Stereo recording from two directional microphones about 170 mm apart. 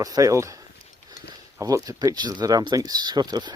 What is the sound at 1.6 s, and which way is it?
Speech, 20° right (ahead or behind).